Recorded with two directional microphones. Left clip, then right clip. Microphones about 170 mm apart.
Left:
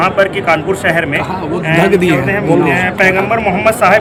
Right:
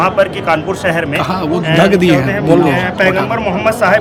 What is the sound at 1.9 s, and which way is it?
Speech, 25° right (ahead or behind).